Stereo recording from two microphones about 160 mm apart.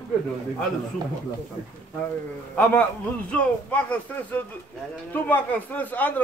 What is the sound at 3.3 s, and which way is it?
A man's voice, 10° left (ahead or behind).